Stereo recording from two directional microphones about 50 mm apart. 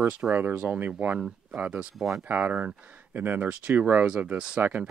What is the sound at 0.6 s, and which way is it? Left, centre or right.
Speech, right.